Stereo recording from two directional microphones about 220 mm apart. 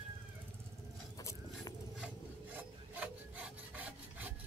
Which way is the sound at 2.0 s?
5° right (ahead or behind).